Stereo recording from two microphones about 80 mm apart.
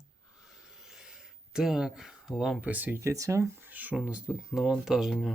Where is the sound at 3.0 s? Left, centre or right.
Right.